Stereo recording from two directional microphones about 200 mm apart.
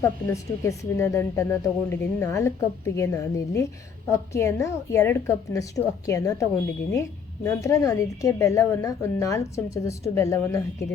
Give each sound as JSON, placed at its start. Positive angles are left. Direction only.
{"t": 0.0, "sound": "speech", "side_deg": 15}